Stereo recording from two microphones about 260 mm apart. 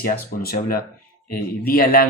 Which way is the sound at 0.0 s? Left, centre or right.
Left.